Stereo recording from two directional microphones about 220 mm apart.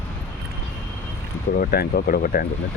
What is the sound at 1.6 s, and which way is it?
Speech, 45° left (ahead or behind).